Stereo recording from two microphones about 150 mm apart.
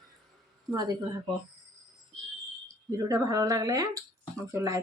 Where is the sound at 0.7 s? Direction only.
25° right (ahead or behind).